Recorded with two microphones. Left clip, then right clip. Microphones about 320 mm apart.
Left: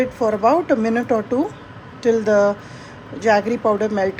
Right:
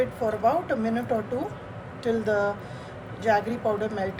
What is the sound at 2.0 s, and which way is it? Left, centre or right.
Speech, left.